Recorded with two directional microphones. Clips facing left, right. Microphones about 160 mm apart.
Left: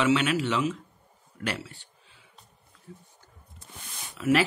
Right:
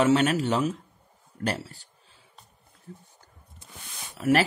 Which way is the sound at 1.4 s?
40° right (ahead or behind).